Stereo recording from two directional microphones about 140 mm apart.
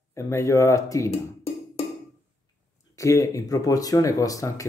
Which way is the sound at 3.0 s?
25° left (ahead or behind).